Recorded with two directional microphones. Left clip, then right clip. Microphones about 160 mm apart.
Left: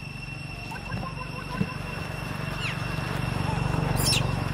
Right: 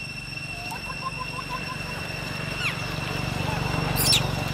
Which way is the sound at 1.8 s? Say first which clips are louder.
Right 3 dB; 20° right (ahead or behind).